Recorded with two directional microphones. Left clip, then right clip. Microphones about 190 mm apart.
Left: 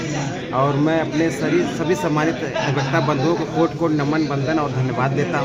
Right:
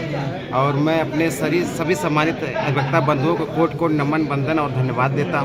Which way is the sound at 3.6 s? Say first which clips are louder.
Even; 30° right (ahead or behind).